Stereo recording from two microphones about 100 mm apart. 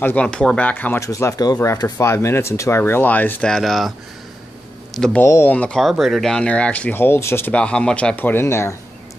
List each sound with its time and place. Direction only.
0.0 s speech: 15° left (ahead or behind)
0.9 s speech: 30° left (ahead or behind)
3.4 s speech: 5° left (ahead or behind)
4.9 s speech: 5° left (ahead or behind)
5.2 s speech: 25° left (ahead or behind)
5.8 s speech: centre (ahead or behind); by 7.5 s 25° left (ahead or behind)
7.5 s speech: 10° left (ahead or behind); by 8.7 s 25° left (ahead or behind)